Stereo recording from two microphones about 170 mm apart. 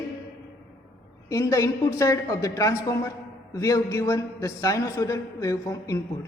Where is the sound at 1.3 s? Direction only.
20° left (ahead or behind).